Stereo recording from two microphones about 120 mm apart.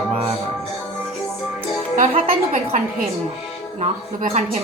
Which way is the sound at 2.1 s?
60° right (ahead or behind).